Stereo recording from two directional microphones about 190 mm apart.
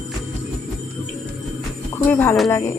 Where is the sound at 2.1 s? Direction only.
10° left (ahead or behind).